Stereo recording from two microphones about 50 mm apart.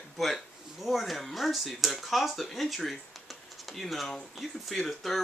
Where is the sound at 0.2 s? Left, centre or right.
Centre.